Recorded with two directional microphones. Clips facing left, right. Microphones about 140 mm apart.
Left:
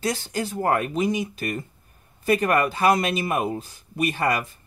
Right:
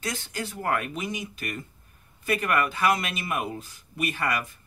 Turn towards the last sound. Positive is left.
turn(degrees=30)  # may be behind; listen again after turning